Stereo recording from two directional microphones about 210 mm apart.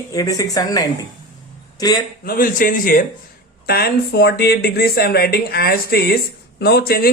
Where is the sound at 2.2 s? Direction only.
45° left (ahead or behind).